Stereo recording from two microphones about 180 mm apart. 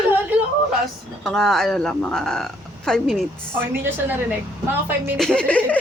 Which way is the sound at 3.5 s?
10° right (ahead or behind).